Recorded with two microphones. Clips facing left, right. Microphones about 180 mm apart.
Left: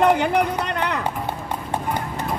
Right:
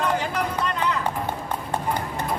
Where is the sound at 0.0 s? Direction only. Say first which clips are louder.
Left 7 dB; 65° left (ahead or behind).